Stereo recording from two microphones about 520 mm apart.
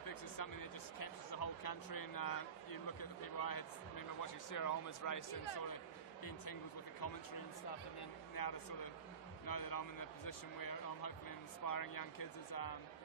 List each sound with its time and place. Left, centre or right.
0.0 s speech: left
8.4 s speech: left